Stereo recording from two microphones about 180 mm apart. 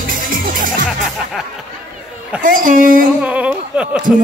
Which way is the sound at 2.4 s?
50° right (ahead or behind).